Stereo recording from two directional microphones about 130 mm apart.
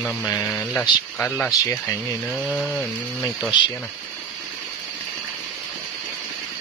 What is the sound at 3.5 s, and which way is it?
Speech, 35° left (ahead or behind).